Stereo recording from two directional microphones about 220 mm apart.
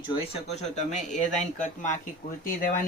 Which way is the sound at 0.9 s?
35° left (ahead or behind).